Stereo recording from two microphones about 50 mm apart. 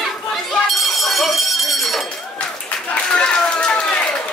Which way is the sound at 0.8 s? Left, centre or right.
Centre.